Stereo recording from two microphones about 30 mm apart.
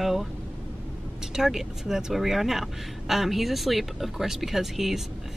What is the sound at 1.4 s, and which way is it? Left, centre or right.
Speech, centre.